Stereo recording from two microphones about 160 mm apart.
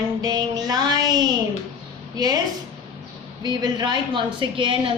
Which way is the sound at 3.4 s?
25° right (ahead or behind).